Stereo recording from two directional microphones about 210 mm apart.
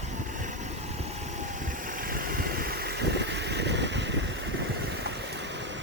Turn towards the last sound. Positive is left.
turn(degrees=-60)  # may be behind; listen again after turning